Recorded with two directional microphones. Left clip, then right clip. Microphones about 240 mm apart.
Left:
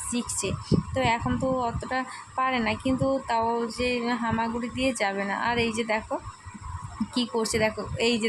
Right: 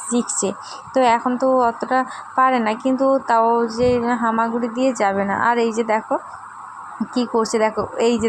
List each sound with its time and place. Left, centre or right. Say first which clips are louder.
0.1 s a woman's voice: right 9 dB; centre
7.1 s a woman's voice: right 8 dB; centre